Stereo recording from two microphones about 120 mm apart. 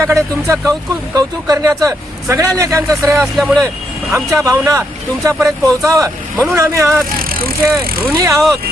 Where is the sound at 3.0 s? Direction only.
Centre (ahead or behind).